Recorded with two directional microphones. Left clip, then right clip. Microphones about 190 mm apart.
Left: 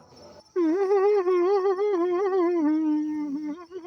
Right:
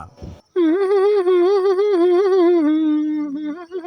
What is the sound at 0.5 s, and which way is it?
Humming, 15° right (ahead or behind).